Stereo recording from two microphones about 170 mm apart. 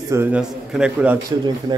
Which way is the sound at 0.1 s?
10° right (ahead or behind).